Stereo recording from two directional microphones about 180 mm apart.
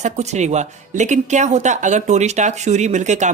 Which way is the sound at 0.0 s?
40° right (ahead or behind).